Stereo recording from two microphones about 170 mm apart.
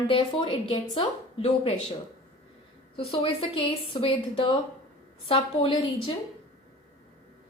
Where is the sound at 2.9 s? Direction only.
35° left (ahead or behind).